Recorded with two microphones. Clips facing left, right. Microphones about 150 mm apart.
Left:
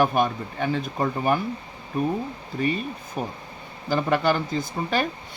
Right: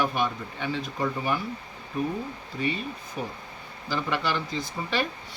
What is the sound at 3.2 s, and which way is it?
Speech, 50° left (ahead or behind).